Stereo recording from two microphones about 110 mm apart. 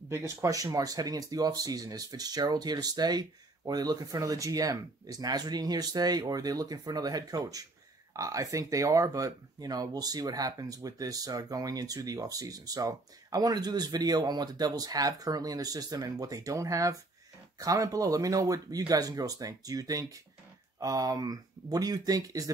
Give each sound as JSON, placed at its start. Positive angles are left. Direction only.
{"t": 0.4, "sound": "speech", "side_deg": -30}